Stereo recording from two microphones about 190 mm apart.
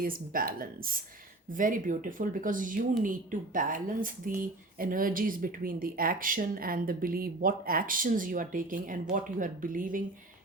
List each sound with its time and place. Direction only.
0.0 s speech: 50° right (ahead or behind)